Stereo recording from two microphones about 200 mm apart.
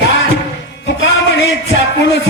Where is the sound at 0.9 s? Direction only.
65° left (ahead or behind).